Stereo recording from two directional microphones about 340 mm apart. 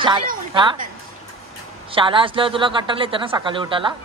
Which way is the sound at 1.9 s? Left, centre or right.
Centre.